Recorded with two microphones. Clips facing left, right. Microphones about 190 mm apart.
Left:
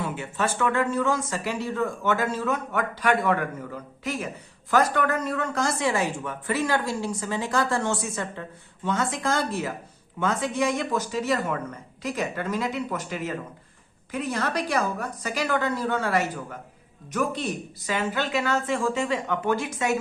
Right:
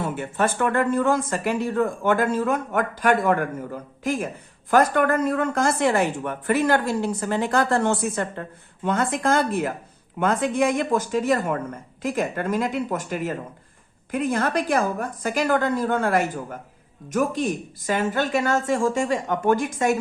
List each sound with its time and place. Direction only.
0.0 s speech: 50° right (ahead or behind)